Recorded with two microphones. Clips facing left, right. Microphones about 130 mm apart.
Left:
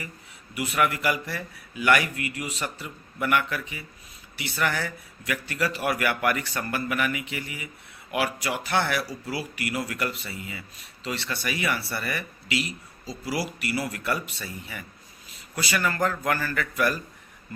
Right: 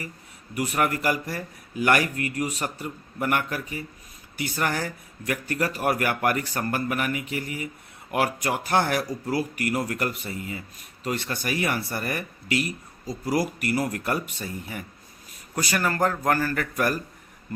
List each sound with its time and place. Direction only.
0.5 s a man's voice: 40° right (ahead or behind)